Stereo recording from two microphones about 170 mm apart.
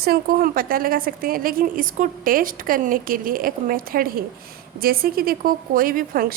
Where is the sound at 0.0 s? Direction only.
60° right (ahead or behind).